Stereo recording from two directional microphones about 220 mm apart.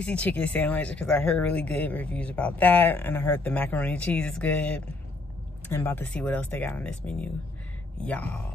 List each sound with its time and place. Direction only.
0.0 s speech: 5° left (ahead or behind)